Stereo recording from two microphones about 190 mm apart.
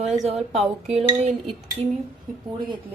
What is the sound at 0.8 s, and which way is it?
Speech, 35° right (ahead or behind).